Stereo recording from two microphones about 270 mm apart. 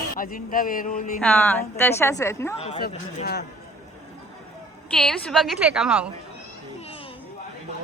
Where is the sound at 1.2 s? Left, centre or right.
Centre.